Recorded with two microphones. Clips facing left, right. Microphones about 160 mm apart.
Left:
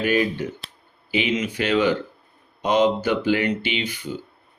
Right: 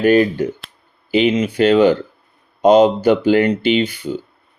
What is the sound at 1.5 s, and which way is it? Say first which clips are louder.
Speech: right 8 dB; 50° right (ahead or behind).